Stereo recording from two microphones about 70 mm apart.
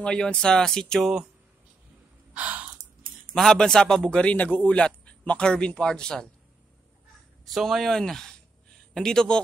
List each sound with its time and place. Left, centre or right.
0.0 s speech: centre
2.3 s gasp: right
3.3 s speech: centre
4.2 s speech: centre
7.4 s speech: centre